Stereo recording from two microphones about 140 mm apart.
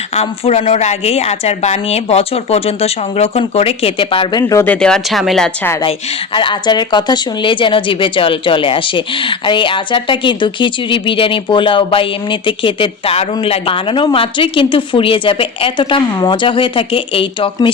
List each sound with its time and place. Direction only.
0.1 s a woman's voice: 45° left (ahead or behind); by 4.6 s 25° left (ahead or behind)
4.6 s speech: 10° left (ahead or behind)
5.8 s speech: 40° left (ahead or behind)